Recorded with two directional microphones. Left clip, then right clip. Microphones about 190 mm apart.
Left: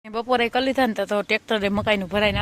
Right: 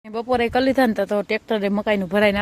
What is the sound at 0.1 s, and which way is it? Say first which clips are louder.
Speech: right 1 dB; 10° right (ahead or behind).